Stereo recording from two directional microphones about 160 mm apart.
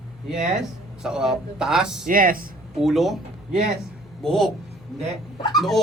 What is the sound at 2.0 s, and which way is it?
Speech, 60° right (ahead or behind).